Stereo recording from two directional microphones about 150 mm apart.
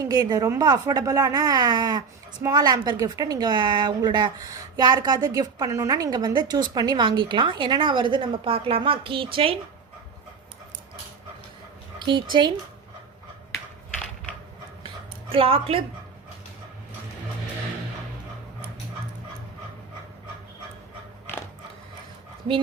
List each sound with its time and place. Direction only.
0.0 s speech: 25° right (ahead or behind)
11.9 s speech: 30° right (ahead or behind)
14.8 s a sound: 35° right (ahead or behind)